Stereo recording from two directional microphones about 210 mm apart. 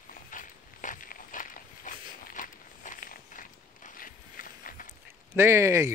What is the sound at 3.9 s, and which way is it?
Clip-clop, 40° left (ahead or behind).